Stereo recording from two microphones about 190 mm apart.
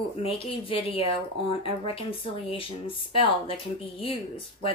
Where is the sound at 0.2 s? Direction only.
30° left (ahead or behind).